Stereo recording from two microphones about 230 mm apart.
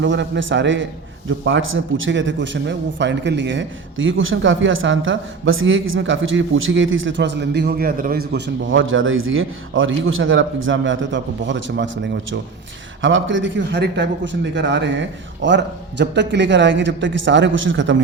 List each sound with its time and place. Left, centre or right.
0.0 s a man's voice: right